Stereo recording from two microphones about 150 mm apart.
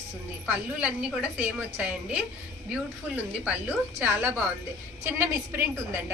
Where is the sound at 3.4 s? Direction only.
10° right (ahead or behind).